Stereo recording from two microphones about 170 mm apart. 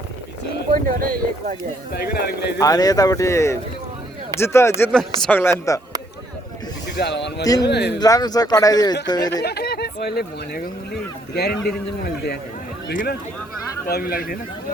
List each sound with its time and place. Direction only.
0.7 s speech: 55° right (ahead or behind)
1.9 s speech: 70° left (ahead or behind)
2.6 s speech: 20° left (ahead or behind)
4.9 s speech: 5° left (ahead or behind)
6.9 s a man's voice: 85° left
7.4 s speech: 20° left (ahead or behind)
7.7 s speech: 75° left (ahead or behind)
7.9 s speech: 20° left (ahead or behind)
9.4 s speech: 70° left (ahead or behind)
13.8 s speech: 60° left (ahead or behind)